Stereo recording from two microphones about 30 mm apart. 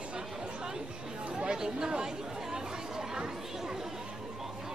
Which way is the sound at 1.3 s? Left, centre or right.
Right.